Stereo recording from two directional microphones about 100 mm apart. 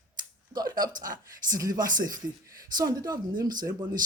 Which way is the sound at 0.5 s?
40° right (ahead or behind).